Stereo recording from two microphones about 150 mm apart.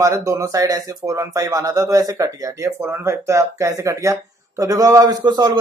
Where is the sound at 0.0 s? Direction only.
20° right (ahead or behind).